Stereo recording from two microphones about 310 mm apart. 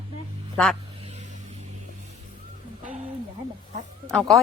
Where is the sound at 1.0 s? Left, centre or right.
Right.